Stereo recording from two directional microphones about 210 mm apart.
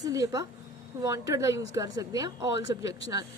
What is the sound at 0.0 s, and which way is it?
A woman's voice, 15° right (ahead or behind).